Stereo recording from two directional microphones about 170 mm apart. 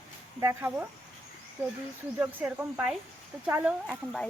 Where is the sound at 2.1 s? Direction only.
10° right (ahead or behind).